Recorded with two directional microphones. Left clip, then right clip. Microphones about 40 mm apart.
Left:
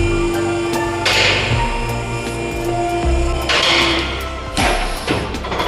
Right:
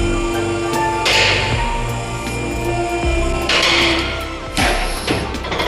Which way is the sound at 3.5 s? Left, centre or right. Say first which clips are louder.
Even; centre.